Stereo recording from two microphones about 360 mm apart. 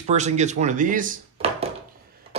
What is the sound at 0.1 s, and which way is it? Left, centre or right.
Speech, centre.